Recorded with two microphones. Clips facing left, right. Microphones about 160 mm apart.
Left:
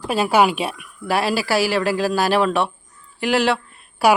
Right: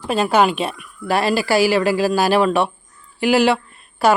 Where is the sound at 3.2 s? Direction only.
Centre (ahead or behind).